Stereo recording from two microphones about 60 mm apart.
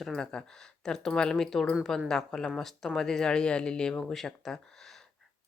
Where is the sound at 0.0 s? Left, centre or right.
Centre.